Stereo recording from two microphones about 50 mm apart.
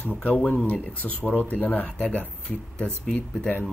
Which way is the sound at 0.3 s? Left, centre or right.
Left.